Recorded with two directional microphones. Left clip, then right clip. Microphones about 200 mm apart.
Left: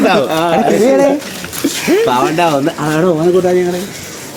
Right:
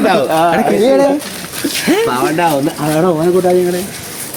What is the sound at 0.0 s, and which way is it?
Speech, 25° left (ahead or behind).